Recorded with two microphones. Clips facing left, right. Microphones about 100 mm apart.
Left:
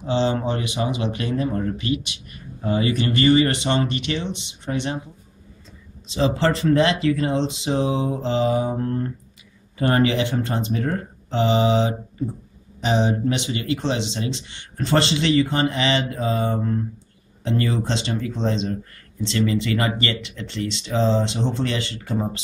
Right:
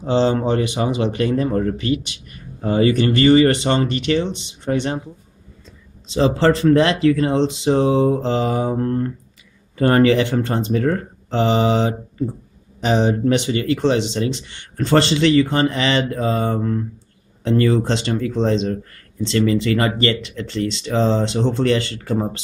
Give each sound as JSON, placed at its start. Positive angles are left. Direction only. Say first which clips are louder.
{"t": 0.0, "sound": "speech", "louder": "right 4 dB", "side_deg": -40}
{"t": 6.1, "sound": "speech", "louder": "right 5 dB", "side_deg": -40}